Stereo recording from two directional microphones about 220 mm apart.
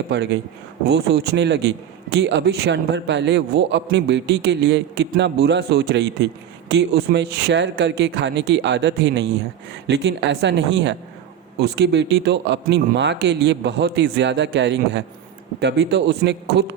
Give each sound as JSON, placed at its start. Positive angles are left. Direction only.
{"t": 0.1, "sound": "a man's voice", "side_deg": -50}